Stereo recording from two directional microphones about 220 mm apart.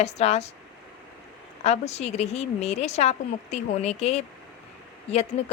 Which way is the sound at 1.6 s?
30° left (ahead or behind).